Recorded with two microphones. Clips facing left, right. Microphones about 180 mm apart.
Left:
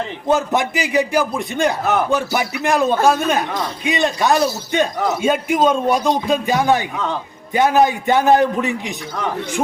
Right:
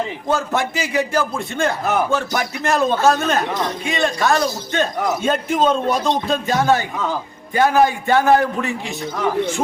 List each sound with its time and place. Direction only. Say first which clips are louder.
0.3 s a man's voice: left 4 dB; 20° left (ahead or behind)